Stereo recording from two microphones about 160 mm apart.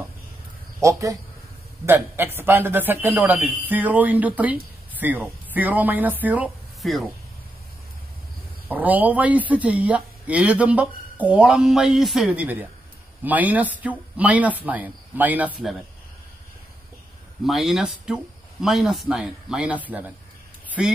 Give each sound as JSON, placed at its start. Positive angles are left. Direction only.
{"t": 0.7, "sound": "a man's voice", "side_deg": -20}
{"t": 8.6, "sound": "a man's voice", "side_deg": -10}
{"t": 17.5, "sound": "a man's voice", "side_deg": 0}